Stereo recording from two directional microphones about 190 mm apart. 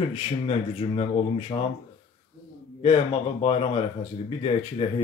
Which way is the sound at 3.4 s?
30° left (ahead or behind).